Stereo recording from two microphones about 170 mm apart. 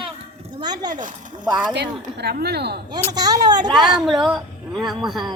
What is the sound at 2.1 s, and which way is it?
Speech, 70° right (ahead or behind).